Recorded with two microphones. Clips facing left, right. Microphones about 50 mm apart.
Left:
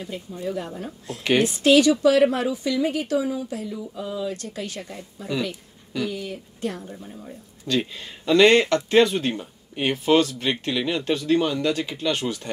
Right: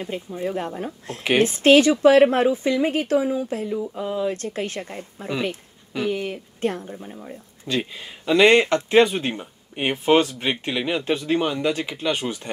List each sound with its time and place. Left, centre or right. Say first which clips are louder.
0.0 s speech: right 3 dB; right
6.9 s speech: right 2 dB; right
7.6 s speech: left 1 dB; centre